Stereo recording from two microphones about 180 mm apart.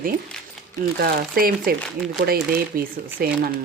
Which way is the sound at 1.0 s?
55° right (ahead or behind).